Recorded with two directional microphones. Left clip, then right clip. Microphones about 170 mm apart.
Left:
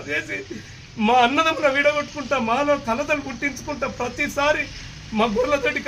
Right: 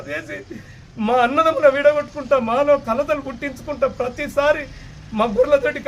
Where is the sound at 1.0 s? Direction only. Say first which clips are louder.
Right 1 dB; 20° right (ahead or behind).